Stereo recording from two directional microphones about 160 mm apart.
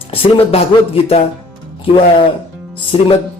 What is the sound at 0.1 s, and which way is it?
Speech, 35° left (ahead or behind).